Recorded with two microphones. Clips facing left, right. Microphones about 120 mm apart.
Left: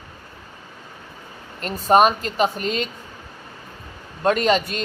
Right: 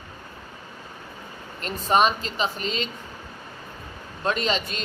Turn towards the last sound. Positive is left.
turn(degrees=50)  # may be behind; listen again after turning